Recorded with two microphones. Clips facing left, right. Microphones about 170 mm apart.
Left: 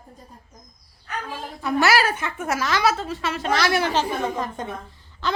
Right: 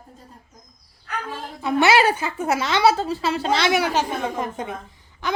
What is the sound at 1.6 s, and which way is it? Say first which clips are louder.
A woman's voice: right 3 dB; 25° right (ahead or behind).